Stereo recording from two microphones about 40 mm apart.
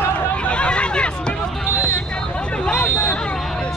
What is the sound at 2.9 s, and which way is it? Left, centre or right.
Hubbub, left.